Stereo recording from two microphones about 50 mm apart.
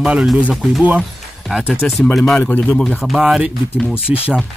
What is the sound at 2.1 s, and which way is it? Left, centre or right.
Speech, centre.